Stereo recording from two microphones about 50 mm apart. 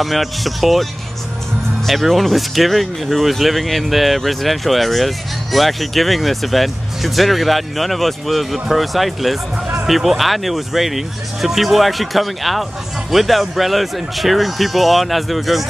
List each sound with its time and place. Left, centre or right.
0.0 s speech: centre